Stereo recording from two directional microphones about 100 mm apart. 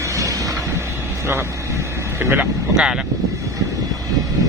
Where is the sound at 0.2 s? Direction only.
35° right (ahead or behind).